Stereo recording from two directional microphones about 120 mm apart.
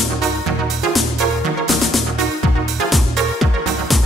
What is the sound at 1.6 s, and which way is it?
Music, centre (ahead or behind).